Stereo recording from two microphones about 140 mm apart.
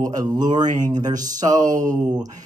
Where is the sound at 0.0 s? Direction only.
25° right (ahead or behind).